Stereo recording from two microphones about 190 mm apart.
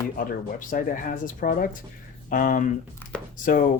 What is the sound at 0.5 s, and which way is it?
Speech, 45° left (ahead or behind).